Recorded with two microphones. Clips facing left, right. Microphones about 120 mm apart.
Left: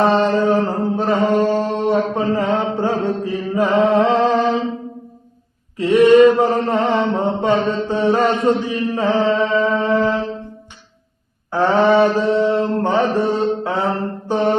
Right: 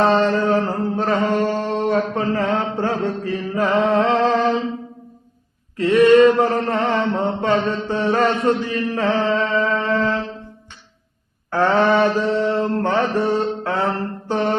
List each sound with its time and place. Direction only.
0.0 s music: 15° left (ahead or behind)
2.7 s mantra: 15° left (ahead or behind)
5.7 s mantra: 15° left (ahead or behind)
11.5 s mantra: 15° left (ahead or behind)